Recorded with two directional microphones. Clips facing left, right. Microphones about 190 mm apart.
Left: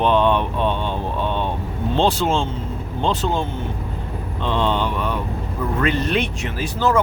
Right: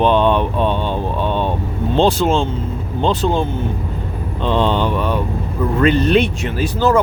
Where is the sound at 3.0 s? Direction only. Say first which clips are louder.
Right 4 dB; 35° right (ahead or behind).